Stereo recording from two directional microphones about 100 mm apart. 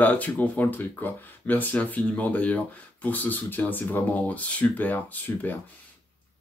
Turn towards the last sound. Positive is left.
turn(degrees=15)  # may be behind; listen again after turning